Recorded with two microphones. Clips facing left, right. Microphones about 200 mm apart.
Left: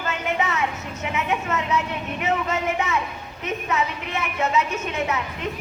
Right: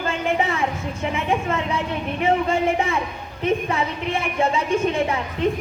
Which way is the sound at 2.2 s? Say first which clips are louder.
Right 5 dB; 30° right (ahead or behind).